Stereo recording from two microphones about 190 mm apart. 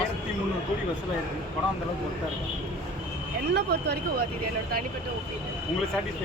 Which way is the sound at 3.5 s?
55° right (ahead or behind).